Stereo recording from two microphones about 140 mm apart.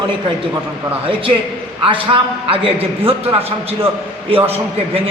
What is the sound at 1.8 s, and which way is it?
Speech, 40° right (ahead or behind).